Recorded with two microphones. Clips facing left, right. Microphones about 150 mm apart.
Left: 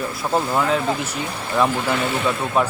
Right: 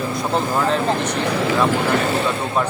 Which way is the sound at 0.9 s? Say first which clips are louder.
Right 7 dB; 65° right (ahead or behind).